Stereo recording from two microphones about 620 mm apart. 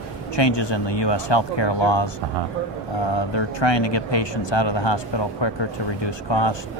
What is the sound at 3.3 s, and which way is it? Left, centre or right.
Speech, left.